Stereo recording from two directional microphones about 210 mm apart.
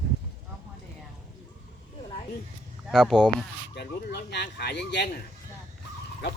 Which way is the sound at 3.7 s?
55° left (ahead or behind).